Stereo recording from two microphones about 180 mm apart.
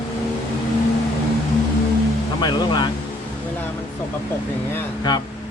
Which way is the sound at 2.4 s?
25° left (ahead or behind).